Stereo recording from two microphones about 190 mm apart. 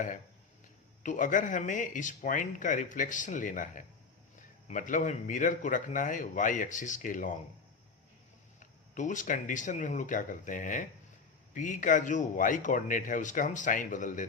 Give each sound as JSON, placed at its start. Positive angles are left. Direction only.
{"t": 1.0, "sound": "speech", "side_deg": 45}
{"t": 8.5, "sound": "speech", "side_deg": 40}